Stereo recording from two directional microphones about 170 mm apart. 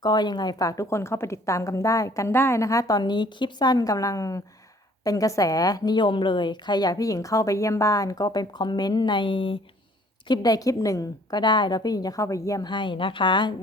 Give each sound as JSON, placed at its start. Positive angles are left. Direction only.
{"t": 0.0, "sound": "a woman's voice", "side_deg": 25}